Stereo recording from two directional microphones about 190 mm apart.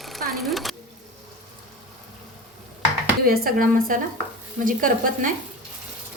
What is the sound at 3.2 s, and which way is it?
Speech, 50° right (ahead or behind).